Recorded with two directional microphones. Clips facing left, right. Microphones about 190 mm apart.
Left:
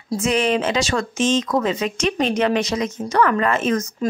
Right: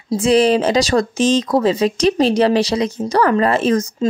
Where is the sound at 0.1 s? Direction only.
35° right (ahead or behind).